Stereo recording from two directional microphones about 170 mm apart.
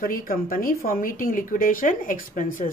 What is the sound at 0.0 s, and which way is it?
A woman's voice, 55° left (ahead or behind).